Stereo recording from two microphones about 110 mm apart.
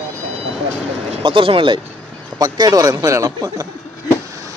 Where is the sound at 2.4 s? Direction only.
35° right (ahead or behind).